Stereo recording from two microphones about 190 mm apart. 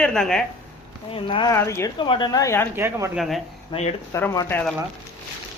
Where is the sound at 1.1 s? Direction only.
25° left (ahead or behind).